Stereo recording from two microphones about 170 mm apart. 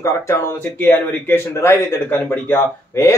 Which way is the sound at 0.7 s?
10° left (ahead or behind).